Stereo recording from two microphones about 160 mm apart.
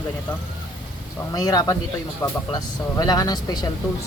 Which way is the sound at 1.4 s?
25° left (ahead or behind).